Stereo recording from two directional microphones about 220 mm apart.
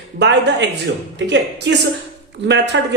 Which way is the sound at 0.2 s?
50° right (ahead or behind).